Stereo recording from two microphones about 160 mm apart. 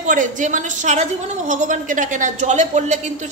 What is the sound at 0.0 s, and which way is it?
A woman's voice, 55° right (ahead or behind).